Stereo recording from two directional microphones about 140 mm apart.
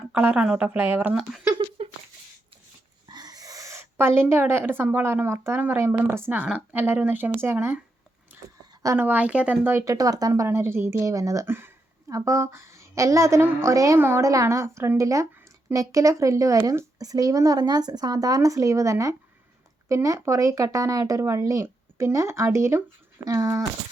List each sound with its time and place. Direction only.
0.1 s speech: 10° right (ahead or behind)
3.1 s a woman's voice: 30° right (ahead or behind)
8.3 s a sound: 15° right (ahead or behind)
8.8 s speech: 20° right (ahead or behind)